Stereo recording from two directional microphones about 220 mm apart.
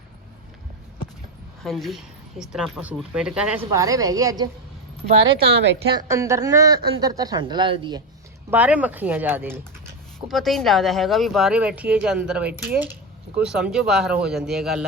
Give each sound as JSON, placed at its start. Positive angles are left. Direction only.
{"t": 1.6, "sound": "speech", "side_deg": 0}
{"t": 3.7, "sound": "speech", "side_deg": -15}
{"t": 8.4, "sound": "speech", "side_deg": -5}